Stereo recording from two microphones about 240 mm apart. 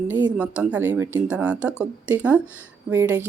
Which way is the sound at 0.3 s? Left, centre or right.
Centre.